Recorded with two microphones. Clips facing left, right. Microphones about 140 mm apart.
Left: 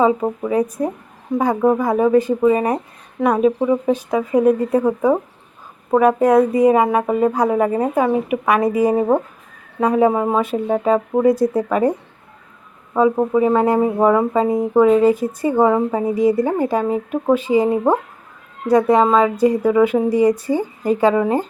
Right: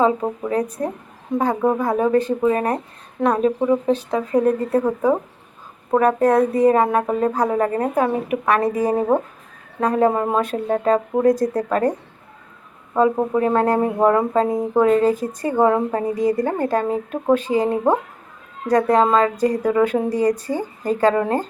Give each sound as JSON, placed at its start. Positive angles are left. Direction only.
{"t": 0.0, "sound": "a woman's voice", "side_deg": 5}